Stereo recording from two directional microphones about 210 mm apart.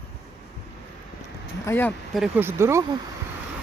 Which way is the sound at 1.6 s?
10° left (ahead or behind).